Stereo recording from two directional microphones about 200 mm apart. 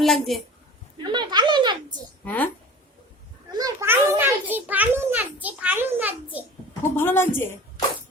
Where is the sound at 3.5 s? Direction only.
20° right (ahead or behind).